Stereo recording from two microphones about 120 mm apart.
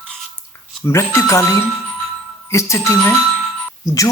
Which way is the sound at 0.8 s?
25° left (ahead or behind).